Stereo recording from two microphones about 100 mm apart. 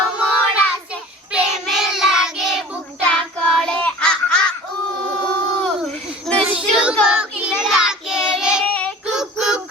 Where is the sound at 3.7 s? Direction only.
10° left (ahead or behind).